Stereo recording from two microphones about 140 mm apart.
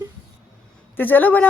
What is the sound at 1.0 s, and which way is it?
Speech, 15° left (ahead or behind).